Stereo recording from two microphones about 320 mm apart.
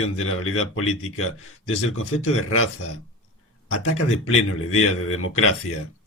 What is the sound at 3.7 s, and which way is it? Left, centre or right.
Speech, left.